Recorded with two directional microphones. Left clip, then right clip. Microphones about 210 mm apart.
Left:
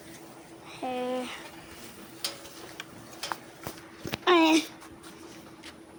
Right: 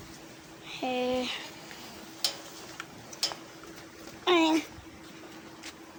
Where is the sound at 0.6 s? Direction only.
20° right (ahead or behind).